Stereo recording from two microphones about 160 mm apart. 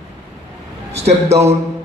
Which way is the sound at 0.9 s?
40° right (ahead or behind).